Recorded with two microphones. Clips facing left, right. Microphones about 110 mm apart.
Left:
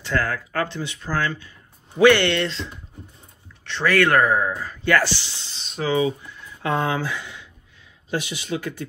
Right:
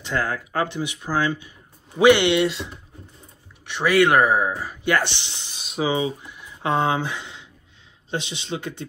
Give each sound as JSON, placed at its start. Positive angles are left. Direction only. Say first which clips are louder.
{"t": 0.0, "sound": "a man's voice", "louder": "left 1 dB", "side_deg": -20}